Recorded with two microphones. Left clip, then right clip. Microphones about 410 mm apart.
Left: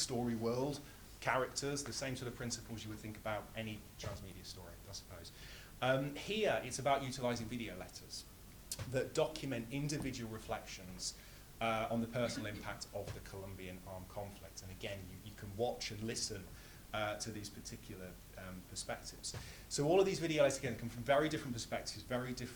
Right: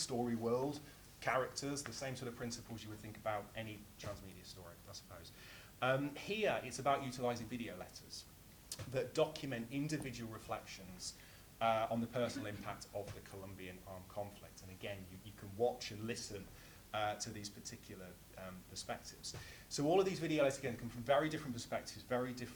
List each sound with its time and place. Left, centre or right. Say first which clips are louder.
0.0 s speech: left 1 dB; left
8.7 s speech: left 2 dB; left
15.8 s speech: left 3 dB; left